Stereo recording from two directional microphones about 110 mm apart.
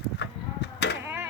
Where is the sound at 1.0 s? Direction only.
20° right (ahead or behind).